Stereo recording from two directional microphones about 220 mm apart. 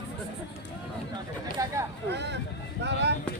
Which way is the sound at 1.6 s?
15° right (ahead or behind).